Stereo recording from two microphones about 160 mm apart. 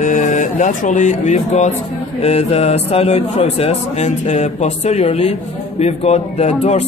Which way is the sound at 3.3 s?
40° left (ahead or behind).